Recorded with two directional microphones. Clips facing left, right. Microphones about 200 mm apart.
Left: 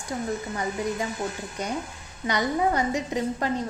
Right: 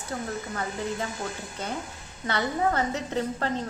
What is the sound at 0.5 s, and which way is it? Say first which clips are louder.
Speech: left 3 dB; 15° left (ahead or behind).